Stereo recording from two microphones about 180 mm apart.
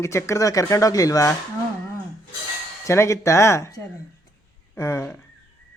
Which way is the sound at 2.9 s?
15° left (ahead or behind).